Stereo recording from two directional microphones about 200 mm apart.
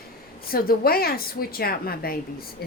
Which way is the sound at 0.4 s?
50° left (ahead or behind).